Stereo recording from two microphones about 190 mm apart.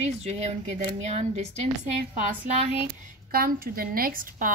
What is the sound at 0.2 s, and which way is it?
Speech, 35° right (ahead or behind).